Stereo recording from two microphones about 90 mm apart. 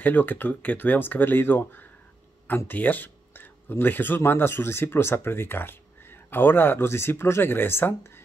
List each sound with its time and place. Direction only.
0.0 s speech: 20° left (ahead or behind)